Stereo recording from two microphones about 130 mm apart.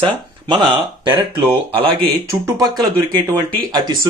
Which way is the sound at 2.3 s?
30° right (ahead or behind).